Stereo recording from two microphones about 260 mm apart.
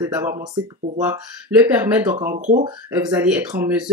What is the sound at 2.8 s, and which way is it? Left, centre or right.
Speech, centre.